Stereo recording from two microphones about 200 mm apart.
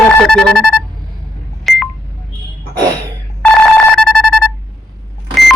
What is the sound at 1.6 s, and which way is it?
Telephone dialing, centre (ahead or behind).